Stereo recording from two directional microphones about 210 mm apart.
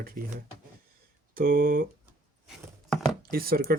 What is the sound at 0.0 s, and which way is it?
Speech, 45° right (ahead or behind).